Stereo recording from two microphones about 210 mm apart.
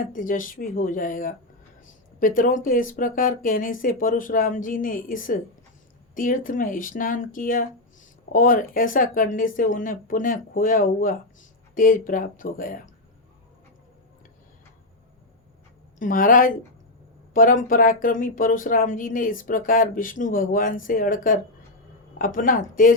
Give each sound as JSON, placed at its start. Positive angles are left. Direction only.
{"t": 0.0, "sound": "speech", "side_deg": 40}
{"t": 16.0, "sound": "speech", "side_deg": 40}